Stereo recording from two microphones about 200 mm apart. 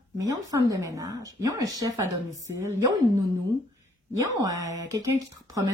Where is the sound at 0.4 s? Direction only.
15° right (ahead or behind).